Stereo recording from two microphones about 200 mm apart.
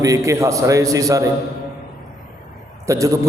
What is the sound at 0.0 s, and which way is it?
A man's voice, 15° right (ahead or behind).